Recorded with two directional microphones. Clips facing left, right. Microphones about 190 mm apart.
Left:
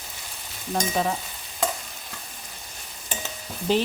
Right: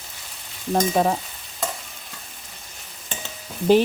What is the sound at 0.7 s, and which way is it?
Speech, 40° right (ahead or behind).